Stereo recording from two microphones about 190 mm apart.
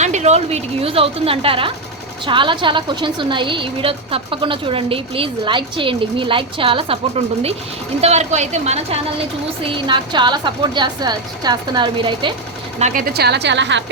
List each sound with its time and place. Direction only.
0.0 s a woman's voice: 35° right (ahead or behind)
8.0 s a woman's voice: 35° right (ahead or behind)
12.8 s a woman's voice: 45° right (ahead or behind); by 13.9 s 70° right (ahead or behind)